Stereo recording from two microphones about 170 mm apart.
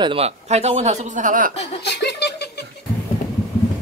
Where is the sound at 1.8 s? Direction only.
80° left.